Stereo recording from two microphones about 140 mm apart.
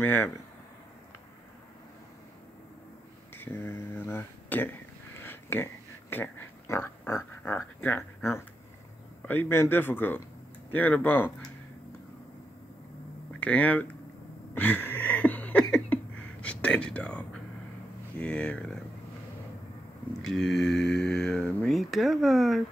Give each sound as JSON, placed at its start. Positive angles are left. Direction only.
{"t": 0.0, "sound": "speech", "side_deg": 15}
{"t": 3.3, "sound": "speech", "side_deg": 15}
{"t": 13.3, "sound": "speech", "side_deg": 10}
{"t": 14.5, "sound": "a sound", "side_deg": 15}
{"t": 15.7, "sound": "whispering", "side_deg": 10}
{"t": 18.1, "sound": "speech", "side_deg": 10}
{"t": 20.2, "sound": "cattle", "side_deg": 0}